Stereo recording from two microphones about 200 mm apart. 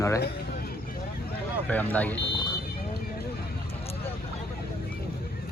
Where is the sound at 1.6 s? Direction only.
10° left (ahead or behind).